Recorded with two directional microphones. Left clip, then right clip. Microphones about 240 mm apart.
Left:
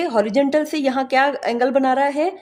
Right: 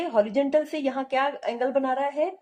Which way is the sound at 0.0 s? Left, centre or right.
Left.